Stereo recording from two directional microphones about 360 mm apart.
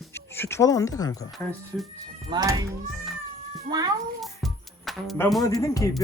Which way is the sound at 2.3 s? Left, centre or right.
Centre.